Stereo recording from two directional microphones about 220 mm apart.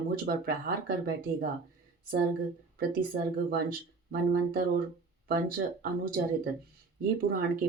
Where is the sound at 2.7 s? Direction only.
40° right (ahead or behind).